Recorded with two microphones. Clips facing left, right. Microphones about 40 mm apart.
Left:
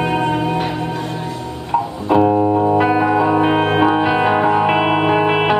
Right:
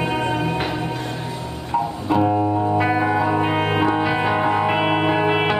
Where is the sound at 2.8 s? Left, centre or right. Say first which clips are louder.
Left 4 dB; centre.